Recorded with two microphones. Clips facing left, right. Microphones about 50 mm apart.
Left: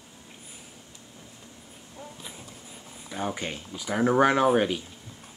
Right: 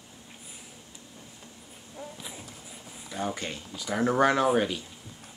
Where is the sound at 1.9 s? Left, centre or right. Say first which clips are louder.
Right 2 dB; centre.